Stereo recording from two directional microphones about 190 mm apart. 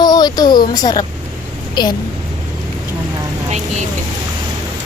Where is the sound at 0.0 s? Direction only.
20° left (ahead or behind).